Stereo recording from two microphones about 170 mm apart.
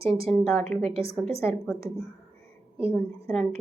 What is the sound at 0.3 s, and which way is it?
Speech, 5° left (ahead or behind).